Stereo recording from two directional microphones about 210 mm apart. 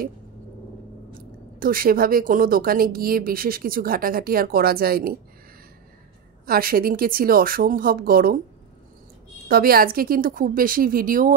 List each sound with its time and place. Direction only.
1.6 s speech: 45° right (ahead or behind)
6.4 s speech: 45° right (ahead or behind)
9.5 s speech: 45° right (ahead or behind)